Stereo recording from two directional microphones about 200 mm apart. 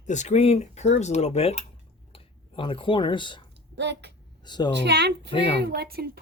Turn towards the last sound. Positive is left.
turn(degrees=-50)  # may be behind; listen again after turning